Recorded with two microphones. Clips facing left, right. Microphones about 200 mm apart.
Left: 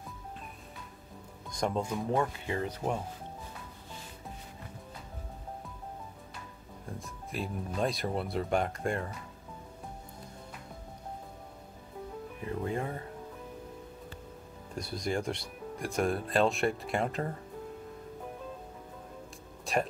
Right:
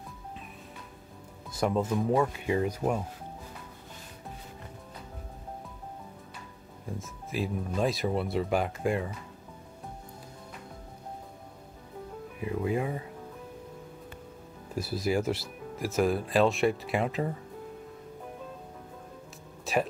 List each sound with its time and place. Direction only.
1.5 s speech: 5° right (ahead or behind)
2.3 s speech: 15° right (ahead or behind)
7.0 s speech: centre (ahead or behind)
12.4 s speech: 10° right (ahead or behind)
14.8 s speech: 5° right (ahead or behind)
19.6 s music: centre (ahead or behind)